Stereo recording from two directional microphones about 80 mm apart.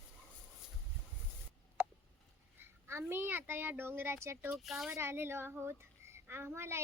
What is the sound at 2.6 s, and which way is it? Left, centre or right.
Speech, right.